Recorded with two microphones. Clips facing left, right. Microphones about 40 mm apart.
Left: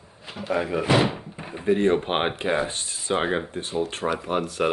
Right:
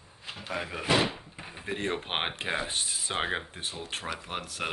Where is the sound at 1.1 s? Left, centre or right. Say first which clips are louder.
Left 7 dB; centre.